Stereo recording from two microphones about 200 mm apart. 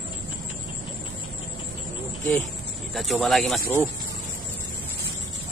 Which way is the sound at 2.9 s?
Centre (ahead or behind).